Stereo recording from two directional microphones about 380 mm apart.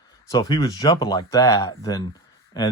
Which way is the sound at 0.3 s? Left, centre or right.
Centre.